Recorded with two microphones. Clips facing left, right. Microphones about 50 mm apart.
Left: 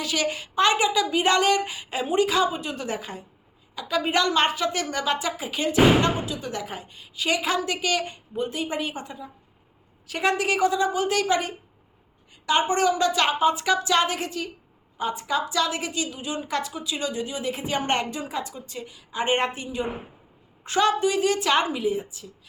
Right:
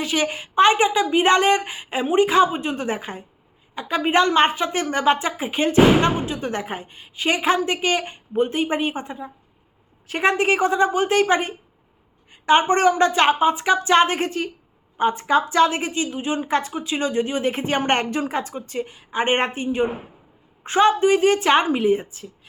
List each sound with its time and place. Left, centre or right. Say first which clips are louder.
0.0 s a woman's voice: right 3 dB; right
21.8 s a woman's voice: right 6 dB; right